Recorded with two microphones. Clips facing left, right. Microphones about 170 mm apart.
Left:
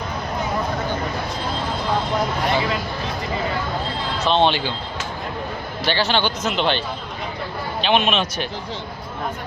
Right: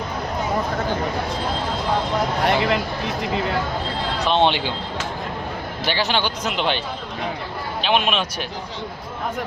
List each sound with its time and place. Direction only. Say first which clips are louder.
2.5 s speech: right 3 dB; 65° right (ahead or behind)
4.3 s speech: left 1 dB; 15° right (ahead or behind)
5.8 s speech: left 2 dB; 10° right (ahead or behind)